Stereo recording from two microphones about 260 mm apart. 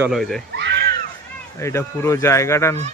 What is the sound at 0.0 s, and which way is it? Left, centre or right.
Speech, centre.